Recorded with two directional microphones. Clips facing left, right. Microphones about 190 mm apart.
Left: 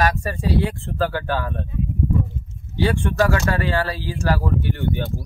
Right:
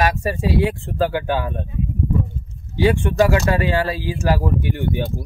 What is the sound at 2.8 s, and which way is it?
Speech, 20° right (ahead or behind).